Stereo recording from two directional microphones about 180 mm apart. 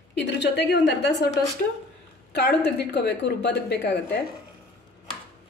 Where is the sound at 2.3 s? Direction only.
65° left (ahead or behind).